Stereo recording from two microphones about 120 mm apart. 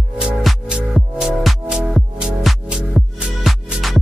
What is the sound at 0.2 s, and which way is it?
Music, 5° right (ahead or behind).